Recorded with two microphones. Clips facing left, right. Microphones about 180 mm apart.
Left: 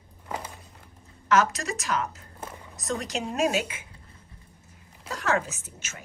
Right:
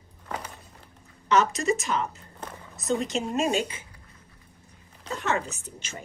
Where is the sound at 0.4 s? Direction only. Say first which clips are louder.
Left 1 dB; centre (ahead or behind).